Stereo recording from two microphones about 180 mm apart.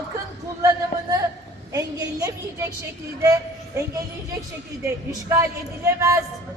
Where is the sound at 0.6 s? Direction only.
20° right (ahead or behind).